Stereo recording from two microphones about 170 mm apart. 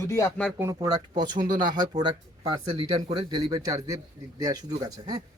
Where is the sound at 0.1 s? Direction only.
15° left (ahead or behind).